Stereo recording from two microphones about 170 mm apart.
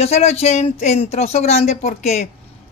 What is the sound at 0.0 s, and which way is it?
Speech, 40° left (ahead or behind).